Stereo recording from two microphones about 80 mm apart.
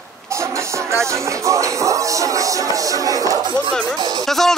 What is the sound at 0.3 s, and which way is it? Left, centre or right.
Music, right.